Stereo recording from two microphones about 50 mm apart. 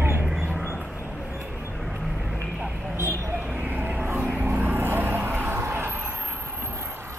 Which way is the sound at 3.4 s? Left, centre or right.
Right.